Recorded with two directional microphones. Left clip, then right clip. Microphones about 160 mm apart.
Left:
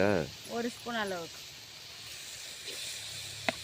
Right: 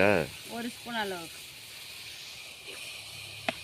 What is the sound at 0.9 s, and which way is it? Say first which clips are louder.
Speech: right 3 dB; 25° left (ahead or behind).